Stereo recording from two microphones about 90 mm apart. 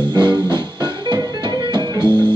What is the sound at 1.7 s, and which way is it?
Music, 60° right (ahead or behind).